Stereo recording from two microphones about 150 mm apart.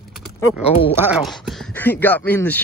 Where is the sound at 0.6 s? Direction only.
40° left (ahead or behind).